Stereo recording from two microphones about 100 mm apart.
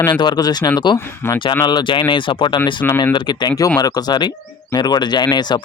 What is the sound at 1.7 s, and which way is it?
Speech, 50° left (ahead or behind).